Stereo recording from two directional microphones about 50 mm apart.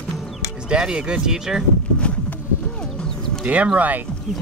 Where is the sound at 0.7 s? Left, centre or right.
Centre.